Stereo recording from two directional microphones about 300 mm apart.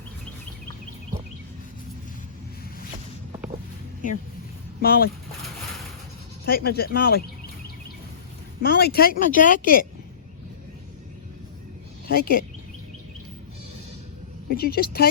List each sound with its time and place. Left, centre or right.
4.8 s speech: left
6.4 s speech: left
8.6 s speech: left
12.0 s speech: left
14.5 s speech: left